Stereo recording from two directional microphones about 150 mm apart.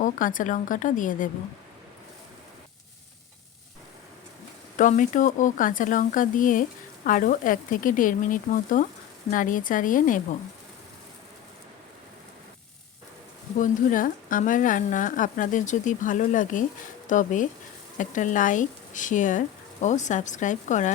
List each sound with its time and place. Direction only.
0.0 s speech: 60° left (ahead or behind)
4.8 s speech: 60° left (ahead or behind)
13.6 s speech: 65° left (ahead or behind)